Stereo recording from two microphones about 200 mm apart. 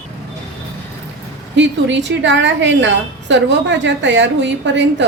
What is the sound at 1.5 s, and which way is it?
A woman's voice, 65° right (ahead or behind).